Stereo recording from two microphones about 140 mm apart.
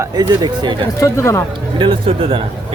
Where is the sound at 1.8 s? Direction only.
40° right (ahead or behind).